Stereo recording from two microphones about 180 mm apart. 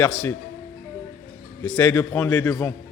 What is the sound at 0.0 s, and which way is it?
Speech, 15° left (ahead or behind).